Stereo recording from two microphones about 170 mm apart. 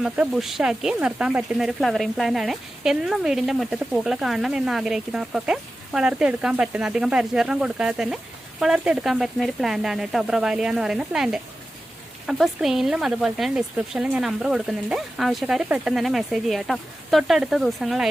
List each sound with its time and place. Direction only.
0.0 s speech: centre (ahead or behind)